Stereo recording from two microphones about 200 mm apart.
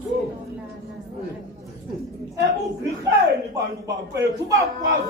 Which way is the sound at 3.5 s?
15° right (ahead or behind).